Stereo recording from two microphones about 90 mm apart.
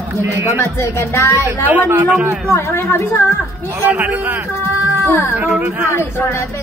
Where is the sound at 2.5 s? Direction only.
30° left (ahead or behind).